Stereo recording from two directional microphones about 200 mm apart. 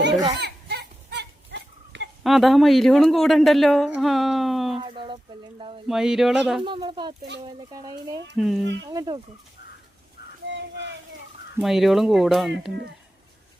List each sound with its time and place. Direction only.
0.3 s goat: 55° right (ahead or behind)
2.2 s speech: centre (ahead or behind)
4.8 s speech: 25° right (ahead or behind)
5.9 s speech: centre (ahead or behind)
6.7 s speech: 25° right (ahead or behind)
8.4 s speech: centre (ahead or behind)
8.6 s speech: 60° right (ahead or behind)
8.9 s speech: 20° right (ahead or behind)
10.5 s a sound: 65° right (ahead or behind)
11.6 s speech: centre (ahead or behind)